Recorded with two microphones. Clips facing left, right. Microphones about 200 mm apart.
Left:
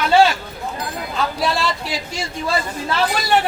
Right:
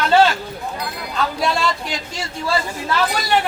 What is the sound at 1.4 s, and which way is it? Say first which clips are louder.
Speech: right 1 dB; 5° left (ahead or behind).